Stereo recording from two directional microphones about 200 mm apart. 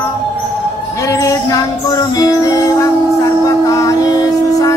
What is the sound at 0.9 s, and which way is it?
Music, 15° left (ahead or behind).